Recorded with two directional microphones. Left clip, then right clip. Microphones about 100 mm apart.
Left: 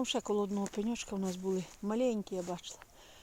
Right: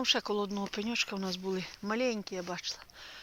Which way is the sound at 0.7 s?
45° left (ahead or behind).